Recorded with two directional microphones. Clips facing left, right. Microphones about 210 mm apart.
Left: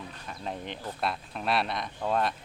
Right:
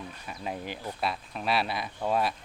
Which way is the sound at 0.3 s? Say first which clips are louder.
Right 1 dB; 5° right (ahead or behind).